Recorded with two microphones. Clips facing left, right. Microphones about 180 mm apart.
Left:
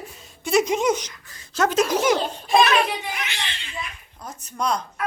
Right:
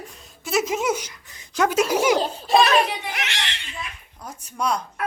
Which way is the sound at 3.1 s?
75° right (ahead or behind).